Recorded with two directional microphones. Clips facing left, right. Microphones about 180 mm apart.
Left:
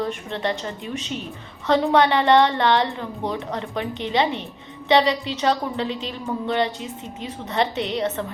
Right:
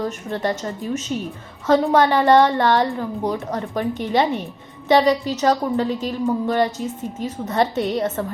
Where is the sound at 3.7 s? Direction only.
20° left (ahead or behind).